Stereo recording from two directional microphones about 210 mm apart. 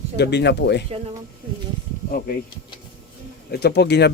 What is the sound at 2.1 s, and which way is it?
Speech, 45° left (ahead or behind).